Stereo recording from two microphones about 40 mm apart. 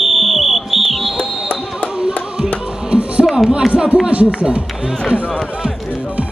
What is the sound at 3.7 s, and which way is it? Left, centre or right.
Speech, right.